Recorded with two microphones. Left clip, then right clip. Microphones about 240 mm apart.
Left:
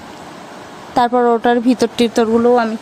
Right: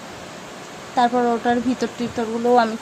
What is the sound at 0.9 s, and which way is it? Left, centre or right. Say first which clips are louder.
A woman's voice: left 5 dB; left.